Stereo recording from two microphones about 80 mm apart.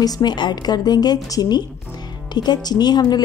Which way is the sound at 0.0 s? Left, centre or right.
Left.